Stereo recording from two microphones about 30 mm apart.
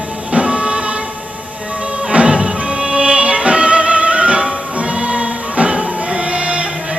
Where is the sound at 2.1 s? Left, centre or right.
Right.